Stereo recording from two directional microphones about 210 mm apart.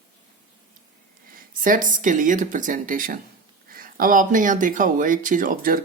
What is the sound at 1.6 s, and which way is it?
Speech, 40° right (ahead or behind).